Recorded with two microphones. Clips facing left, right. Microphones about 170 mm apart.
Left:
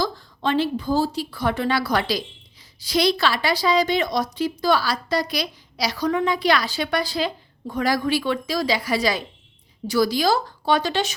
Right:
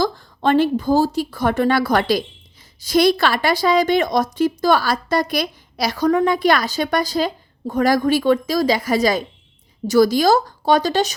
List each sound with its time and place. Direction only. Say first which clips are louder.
0.0 s speech: right 5 dB; 50° right (ahead or behind)